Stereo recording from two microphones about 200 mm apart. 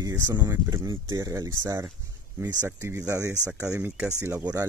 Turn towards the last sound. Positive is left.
turn(degrees=-10)  # may be behind; listen again after turning